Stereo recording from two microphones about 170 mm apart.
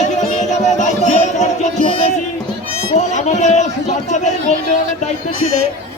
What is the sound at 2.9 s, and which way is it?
A man's voice, 45° left (ahead or behind).